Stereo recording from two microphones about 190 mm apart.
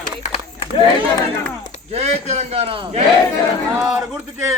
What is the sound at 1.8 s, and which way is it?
A man's voice, 35° right (ahead or behind).